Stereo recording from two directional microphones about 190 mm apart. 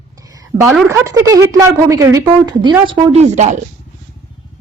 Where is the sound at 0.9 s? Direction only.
15° right (ahead or behind); by 3.6 s 40° right (ahead or behind).